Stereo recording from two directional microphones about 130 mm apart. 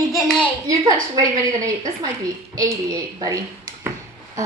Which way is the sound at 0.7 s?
30° right (ahead or behind).